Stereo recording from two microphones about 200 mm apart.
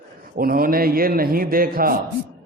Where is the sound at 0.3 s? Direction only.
45° right (ahead or behind).